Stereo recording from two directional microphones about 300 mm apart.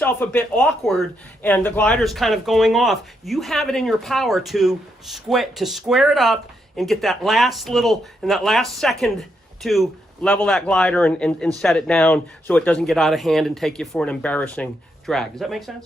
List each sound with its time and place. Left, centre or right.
0.0 s speech: centre